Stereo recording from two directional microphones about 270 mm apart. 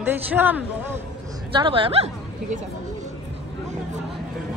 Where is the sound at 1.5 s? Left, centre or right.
Centre.